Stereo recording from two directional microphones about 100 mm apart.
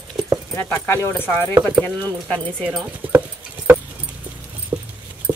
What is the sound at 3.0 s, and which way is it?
Dog, 15° right (ahead or behind).